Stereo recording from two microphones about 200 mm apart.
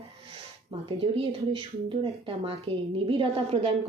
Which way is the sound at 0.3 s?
30° right (ahead or behind).